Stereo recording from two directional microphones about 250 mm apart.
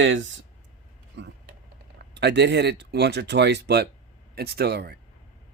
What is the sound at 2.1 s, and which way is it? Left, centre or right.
Speech, right.